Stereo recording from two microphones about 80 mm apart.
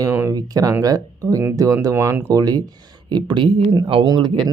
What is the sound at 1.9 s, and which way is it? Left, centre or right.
Speech, right.